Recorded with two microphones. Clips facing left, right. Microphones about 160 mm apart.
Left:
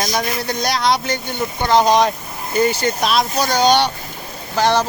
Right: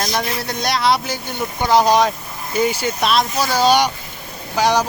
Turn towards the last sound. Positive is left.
turn(degrees=-10)  # may be behind; listen again after turning